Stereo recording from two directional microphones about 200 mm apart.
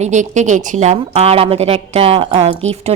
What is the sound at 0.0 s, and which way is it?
A woman's voice, 35° right (ahead or behind).